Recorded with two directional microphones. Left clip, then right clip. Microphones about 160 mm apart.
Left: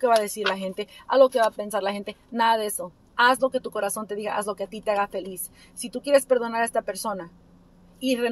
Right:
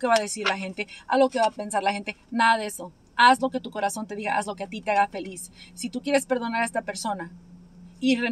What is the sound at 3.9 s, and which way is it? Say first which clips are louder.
Speech: right 1 dB; 10° left (ahead or behind).